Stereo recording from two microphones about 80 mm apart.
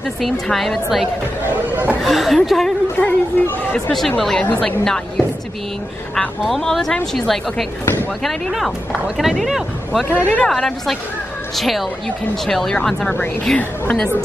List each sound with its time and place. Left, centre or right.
0.2 s a woman's voice: centre
1.5 s speech: right
2.0 s a woman's voice: centre
3.0 s speech: left
3.7 s a woman's voice: centre
6.4 s a woman's voice: centre
7.8 s speech: left
8.2 s a woman's voice: centre
10.0 s speech: left
10.5 s a woman's voice: centre